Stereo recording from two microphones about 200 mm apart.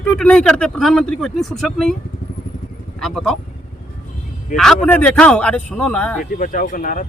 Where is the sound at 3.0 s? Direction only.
Centre (ahead or behind).